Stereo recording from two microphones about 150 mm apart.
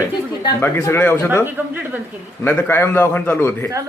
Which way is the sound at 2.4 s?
15° left (ahead or behind).